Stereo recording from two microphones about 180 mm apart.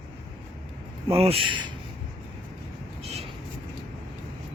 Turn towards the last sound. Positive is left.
turn(degrees=-35)  # may be behind; listen again after turning